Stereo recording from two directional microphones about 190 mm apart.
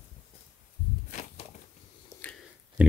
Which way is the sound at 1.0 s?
40° left (ahead or behind).